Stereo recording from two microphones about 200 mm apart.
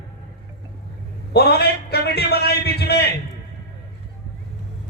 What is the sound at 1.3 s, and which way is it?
A man's voice, 55° left (ahead or behind).